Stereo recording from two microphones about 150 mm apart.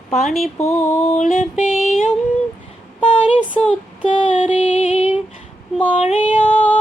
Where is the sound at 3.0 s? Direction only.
35° left (ahead or behind).